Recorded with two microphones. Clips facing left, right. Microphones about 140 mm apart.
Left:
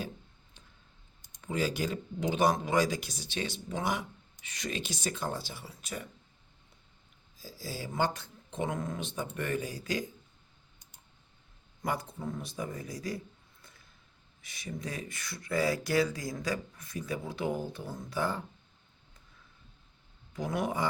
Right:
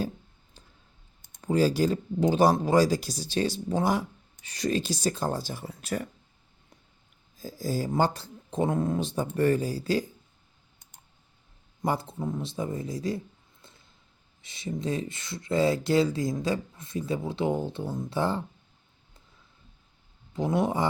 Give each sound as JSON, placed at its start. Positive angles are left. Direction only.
{"t": 1.2, "sound": "speech", "side_deg": -40}
{"t": 5.9, "sound": "speech", "side_deg": -55}
{"t": 7.3, "sound": "speech", "side_deg": -50}
{"t": 11.8, "sound": "speech", "side_deg": -30}
{"t": 20.3, "sound": "speech", "side_deg": -25}